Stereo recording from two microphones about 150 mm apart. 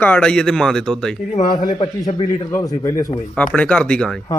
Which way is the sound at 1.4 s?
30° left (ahead or behind).